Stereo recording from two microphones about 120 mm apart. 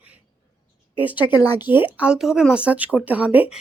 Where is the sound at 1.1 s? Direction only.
40° left (ahead or behind).